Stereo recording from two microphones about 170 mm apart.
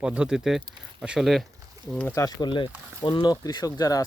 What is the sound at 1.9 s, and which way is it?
Speech, 15° left (ahead or behind).